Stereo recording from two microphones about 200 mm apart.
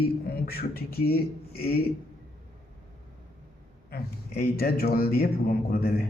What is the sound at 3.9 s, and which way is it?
Speech, 50° left (ahead or behind).